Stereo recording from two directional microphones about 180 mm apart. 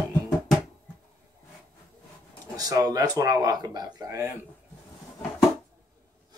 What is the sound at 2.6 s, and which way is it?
Speech, 20° right (ahead or behind).